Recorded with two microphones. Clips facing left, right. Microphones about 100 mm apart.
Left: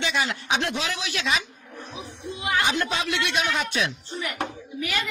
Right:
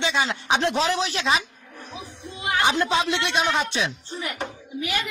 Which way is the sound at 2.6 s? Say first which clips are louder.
Right 4 dB; 25° right (ahead or behind).